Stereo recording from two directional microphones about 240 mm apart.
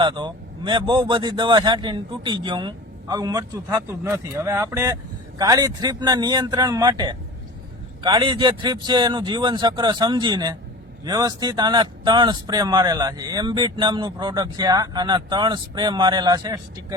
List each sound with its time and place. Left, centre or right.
0.0 s a man's voice: centre